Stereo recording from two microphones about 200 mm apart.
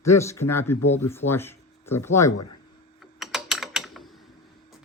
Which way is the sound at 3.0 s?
Centre (ahead or behind).